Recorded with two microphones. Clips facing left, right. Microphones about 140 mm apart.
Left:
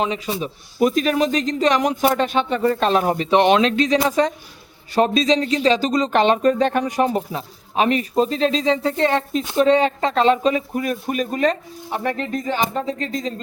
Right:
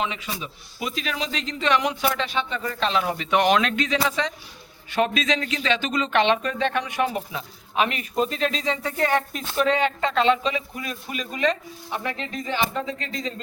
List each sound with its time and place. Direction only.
0.0 s speech: 30° left (ahead or behind)
0.4 s speech: 45° left (ahead or behind)